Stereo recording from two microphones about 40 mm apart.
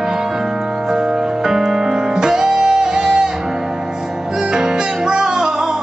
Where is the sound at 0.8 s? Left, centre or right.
Centre.